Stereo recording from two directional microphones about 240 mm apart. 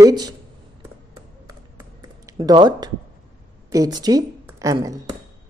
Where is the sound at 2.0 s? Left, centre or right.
Centre.